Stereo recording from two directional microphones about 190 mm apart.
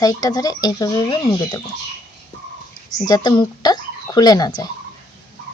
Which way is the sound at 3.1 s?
20° left (ahead or behind).